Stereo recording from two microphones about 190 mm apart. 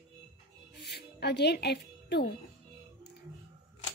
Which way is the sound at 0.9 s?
60° left (ahead or behind).